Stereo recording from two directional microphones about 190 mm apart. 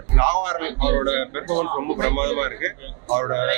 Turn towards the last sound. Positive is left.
turn(degrees=-20)  # may be behind; listen again after turning